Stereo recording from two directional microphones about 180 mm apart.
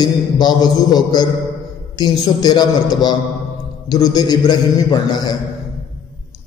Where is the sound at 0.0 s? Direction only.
20° left (ahead or behind).